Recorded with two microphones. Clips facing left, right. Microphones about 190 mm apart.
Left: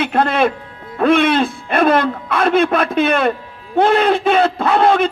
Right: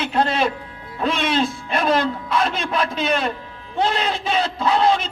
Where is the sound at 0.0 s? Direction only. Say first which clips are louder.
Left 5 dB; 55° left (ahead or behind).